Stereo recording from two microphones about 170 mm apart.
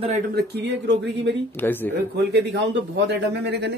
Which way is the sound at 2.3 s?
85° right.